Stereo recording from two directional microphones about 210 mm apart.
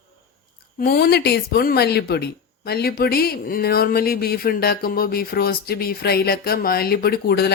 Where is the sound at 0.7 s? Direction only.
45° left (ahead or behind).